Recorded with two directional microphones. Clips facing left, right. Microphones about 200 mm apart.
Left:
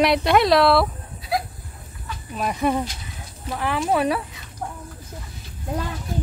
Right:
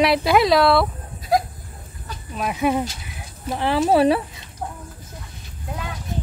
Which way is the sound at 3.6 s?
30° right (ahead or behind).